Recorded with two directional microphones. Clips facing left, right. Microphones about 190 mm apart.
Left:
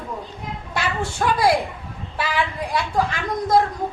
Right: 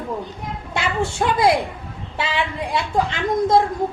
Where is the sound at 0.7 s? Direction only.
25° right (ahead or behind).